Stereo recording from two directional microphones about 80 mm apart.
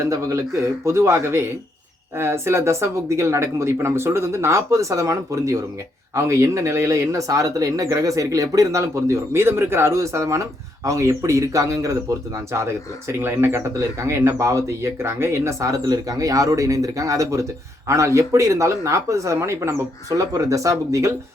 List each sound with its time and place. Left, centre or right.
0.0 s a man's voice: right
15.9 s a man's voice: right